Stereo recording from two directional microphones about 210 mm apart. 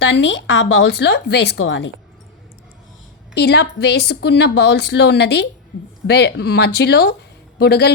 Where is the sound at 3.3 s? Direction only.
55° left (ahead or behind).